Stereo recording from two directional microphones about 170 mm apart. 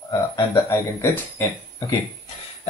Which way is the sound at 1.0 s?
15° left (ahead or behind).